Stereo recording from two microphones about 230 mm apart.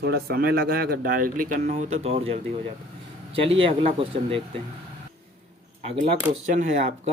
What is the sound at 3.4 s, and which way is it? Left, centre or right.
Speech, right.